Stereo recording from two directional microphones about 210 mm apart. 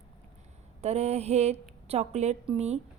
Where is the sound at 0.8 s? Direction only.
30° right (ahead or behind).